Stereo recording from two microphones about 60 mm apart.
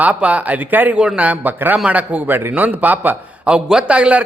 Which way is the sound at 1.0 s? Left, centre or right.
Centre.